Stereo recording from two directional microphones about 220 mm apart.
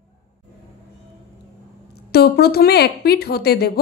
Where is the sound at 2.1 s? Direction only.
45° left (ahead or behind).